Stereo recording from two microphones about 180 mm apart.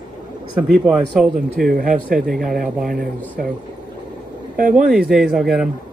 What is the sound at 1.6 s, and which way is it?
Speech, 50° right (ahead or behind).